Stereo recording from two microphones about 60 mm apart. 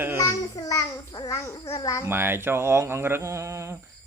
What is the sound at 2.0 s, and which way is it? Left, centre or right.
Speech, right.